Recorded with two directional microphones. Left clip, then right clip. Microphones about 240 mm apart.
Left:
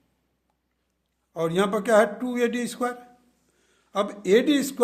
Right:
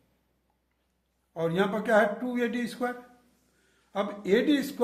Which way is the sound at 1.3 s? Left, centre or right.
Left.